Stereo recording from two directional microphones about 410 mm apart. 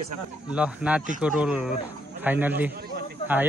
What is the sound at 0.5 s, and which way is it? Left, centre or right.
Speech, centre.